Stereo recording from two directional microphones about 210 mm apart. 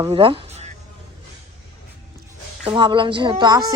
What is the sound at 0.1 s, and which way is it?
Speech, 25° right (ahead or behind).